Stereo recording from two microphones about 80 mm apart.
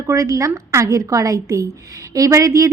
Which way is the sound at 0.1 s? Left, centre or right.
Right.